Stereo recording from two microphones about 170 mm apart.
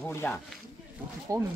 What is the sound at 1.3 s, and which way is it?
Speech, 20° right (ahead or behind).